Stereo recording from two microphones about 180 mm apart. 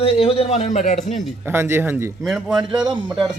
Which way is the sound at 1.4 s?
15° right (ahead or behind).